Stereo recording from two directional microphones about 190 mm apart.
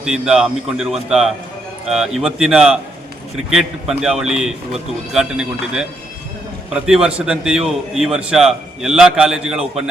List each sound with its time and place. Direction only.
0.0 s a man's voice: 5° right (ahead or behind)